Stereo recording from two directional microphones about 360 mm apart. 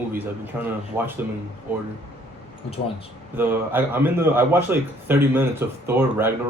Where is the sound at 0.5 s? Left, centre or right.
Centre.